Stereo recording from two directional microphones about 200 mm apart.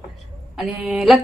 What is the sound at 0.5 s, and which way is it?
Speech, centre (ahead or behind).